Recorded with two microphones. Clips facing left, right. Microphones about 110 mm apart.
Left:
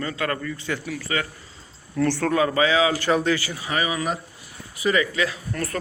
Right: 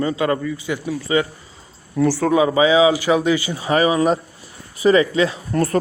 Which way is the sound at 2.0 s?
10° right (ahead or behind).